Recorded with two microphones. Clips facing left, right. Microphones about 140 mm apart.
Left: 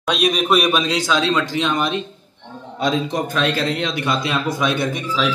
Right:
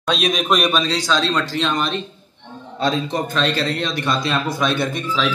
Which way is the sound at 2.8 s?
Centre (ahead or behind).